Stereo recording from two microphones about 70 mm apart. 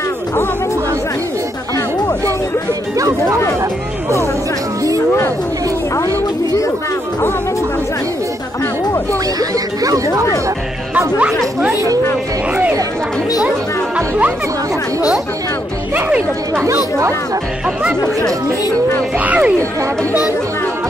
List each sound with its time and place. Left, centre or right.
3.0 s speech: right
9.4 s speech: right
11.1 s speech: centre
13.9 s speech: right
19.1 s speech: centre